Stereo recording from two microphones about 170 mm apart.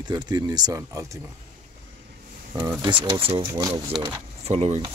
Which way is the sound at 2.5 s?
20° right (ahead or behind).